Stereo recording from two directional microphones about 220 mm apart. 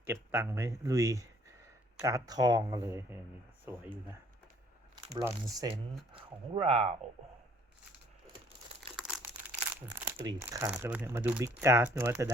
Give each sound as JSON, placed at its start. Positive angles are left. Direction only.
{"t": 0.0, "sound": "speech", "side_deg": -10}
{"t": 5.1, "sound": "speech", "side_deg": -15}
{"t": 9.0, "sound": "crumpling", "side_deg": -5}
{"t": 10.2, "sound": "speech", "side_deg": -15}